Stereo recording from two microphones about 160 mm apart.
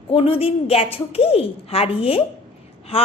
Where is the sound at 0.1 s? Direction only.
35° left (ahead or behind).